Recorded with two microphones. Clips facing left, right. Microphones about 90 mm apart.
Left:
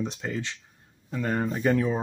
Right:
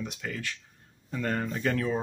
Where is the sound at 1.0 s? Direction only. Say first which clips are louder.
Left 2 dB; 5° left (ahead or behind).